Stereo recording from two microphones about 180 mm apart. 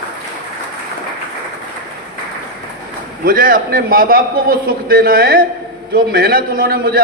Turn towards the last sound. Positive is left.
turn(degrees=-55)  # may be behind; listen again after turning